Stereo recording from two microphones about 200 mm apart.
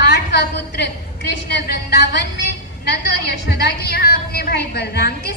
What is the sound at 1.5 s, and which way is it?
Speech, 55° left (ahead or behind).